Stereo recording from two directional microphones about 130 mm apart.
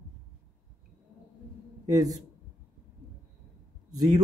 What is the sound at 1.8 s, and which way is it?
Speech, 25° right (ahead or behind).